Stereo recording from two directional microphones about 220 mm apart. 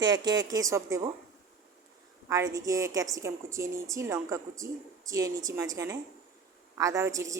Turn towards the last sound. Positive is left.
turn(degrees=-15)  # may be behind; listen again after turning